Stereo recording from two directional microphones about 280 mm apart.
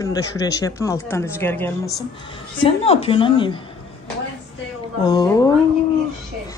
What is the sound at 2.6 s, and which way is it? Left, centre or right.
A woman's voice, left.